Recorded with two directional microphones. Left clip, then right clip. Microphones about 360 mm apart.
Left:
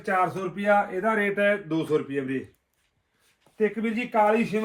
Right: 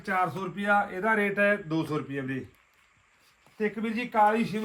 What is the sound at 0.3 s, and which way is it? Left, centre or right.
Speech, centre.